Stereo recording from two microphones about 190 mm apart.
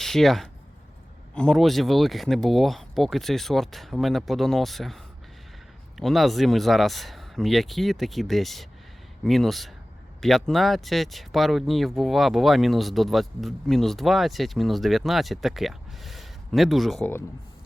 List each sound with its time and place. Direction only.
0.0 s speech: centre (ahead or behind)